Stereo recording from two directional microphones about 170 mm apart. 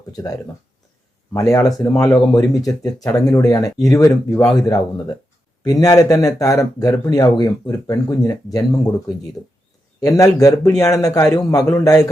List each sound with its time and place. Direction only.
1.3 s speech: 20° left (ahead or behind)
10.0 s speech: 20° left (ahead or behind)